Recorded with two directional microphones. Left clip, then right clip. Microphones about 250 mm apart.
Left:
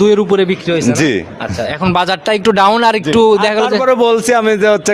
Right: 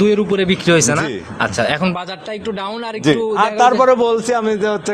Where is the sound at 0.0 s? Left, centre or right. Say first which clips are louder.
Left 5 dB; left.